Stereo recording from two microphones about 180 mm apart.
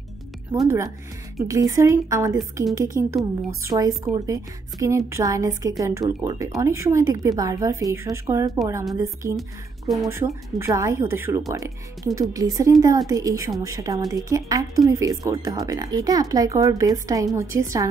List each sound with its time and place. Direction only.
0.7 s a woman's voice: 15° right (ahead or behind)